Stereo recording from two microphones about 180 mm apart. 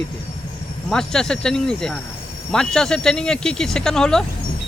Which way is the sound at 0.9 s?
5° left (ahead or behind).